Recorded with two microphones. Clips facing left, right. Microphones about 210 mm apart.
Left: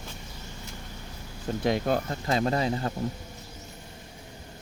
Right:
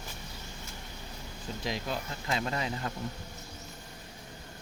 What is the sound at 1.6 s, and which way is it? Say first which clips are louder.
Speech: left 10 dB; 55° left (ahead or behind).